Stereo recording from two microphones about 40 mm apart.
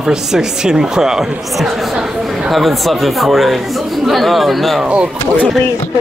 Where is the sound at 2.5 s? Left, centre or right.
Centre.